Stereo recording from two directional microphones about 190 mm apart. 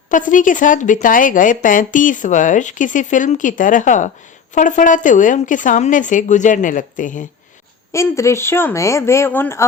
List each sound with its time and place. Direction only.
0.1 s a woman's voice: 45° left (ahead or behind)
7.9 s speech: 15° left (ahead or behind)